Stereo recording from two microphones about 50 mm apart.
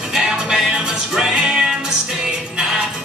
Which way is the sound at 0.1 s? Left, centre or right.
Centre.